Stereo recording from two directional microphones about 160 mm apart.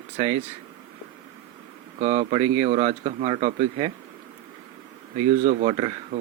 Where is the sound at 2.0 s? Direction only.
45° right (ahead or behind).